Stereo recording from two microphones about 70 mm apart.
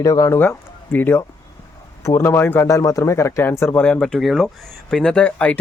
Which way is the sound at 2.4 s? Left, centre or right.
Left.